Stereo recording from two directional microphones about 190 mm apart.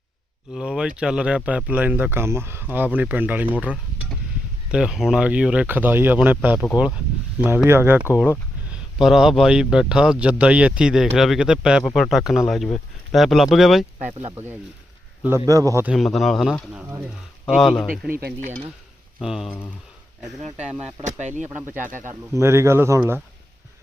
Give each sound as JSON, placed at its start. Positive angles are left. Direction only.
{"t": 0.5, "sound": "speech", "side_deg": -5}
{"t": 15.4, "sound": "speech", "side_deg": -15}
{"t": 15.9, "sound": "speech", "side_deg": 0}
{"t": 18.1, "sound": "cutlery", "side_deg": -55}
{"t": 19.2, "sound": "speech", "side_deg": 0}
{"t": 21.0, "sound": "speech", "side_deg": -40}
{"t": 22.4, "sound": "speech", "side_deg": -15}